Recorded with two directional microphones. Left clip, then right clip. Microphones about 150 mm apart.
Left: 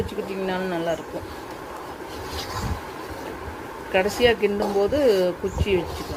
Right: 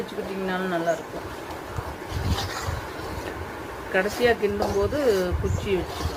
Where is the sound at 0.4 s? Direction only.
30° left (ahead or behind).